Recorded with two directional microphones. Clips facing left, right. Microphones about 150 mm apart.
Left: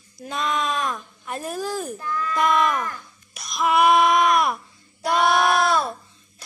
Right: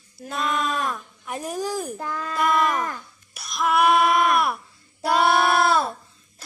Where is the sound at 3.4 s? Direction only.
Centre (ahead or behind).